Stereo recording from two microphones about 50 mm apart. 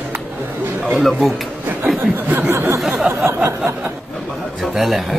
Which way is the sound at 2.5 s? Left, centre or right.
Right.